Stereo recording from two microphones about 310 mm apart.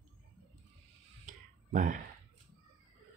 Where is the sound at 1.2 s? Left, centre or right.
Right.